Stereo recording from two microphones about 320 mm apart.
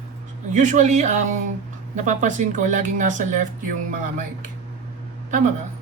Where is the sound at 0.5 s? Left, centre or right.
Right.